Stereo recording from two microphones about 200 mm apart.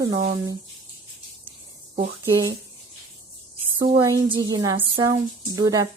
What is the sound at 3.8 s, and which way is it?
A woman's voice, 25° right (ahead or behind).